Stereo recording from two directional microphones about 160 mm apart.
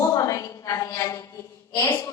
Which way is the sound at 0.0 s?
20° left (ahead or behind).